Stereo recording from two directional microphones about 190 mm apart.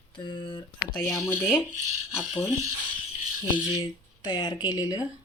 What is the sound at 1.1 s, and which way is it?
Speech, 15° left (ahead or behind).